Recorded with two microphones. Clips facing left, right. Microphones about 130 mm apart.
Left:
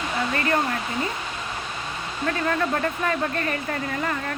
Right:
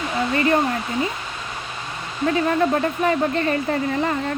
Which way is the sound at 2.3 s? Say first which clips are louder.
Right 5 dB; 20° right (ahead or behind).